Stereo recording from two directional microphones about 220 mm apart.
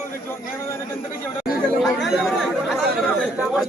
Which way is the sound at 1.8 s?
Centre (ahead or behind).